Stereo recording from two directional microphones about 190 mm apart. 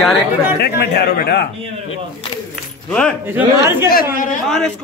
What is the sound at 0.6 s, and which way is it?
Speech, 60° left (ahead or behind).